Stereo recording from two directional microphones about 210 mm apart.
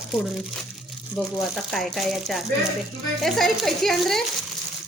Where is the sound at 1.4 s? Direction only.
Centre (ahead or behind).